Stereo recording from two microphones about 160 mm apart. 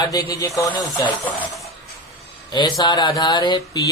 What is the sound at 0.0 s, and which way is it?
Speech, 25° left (ahead or behind).